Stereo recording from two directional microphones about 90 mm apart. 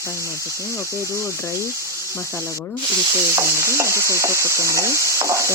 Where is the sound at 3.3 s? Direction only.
30° right (ahead or behind).